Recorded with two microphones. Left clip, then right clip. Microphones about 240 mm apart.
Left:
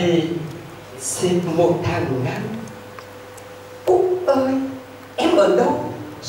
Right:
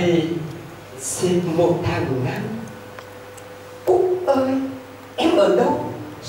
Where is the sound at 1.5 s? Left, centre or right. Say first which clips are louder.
Left 2 dB; left.